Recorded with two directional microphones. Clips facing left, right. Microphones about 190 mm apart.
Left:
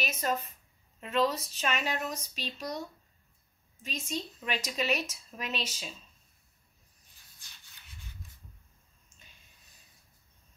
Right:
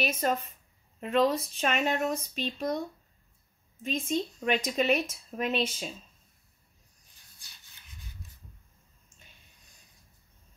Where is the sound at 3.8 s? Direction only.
55° right (ahead or behind).